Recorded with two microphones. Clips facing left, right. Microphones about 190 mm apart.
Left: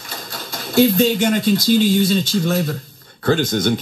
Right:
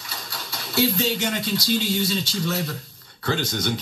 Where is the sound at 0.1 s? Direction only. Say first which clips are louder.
Left 5 dB; 50° left (ahead or behind).